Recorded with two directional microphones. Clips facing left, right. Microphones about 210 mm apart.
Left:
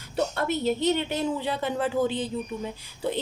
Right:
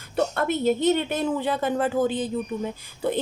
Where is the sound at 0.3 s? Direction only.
50° right (ahead or behind).